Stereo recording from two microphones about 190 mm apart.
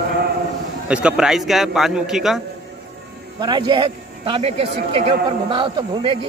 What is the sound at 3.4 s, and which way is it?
A man's voice, 25° right (ahead or behind).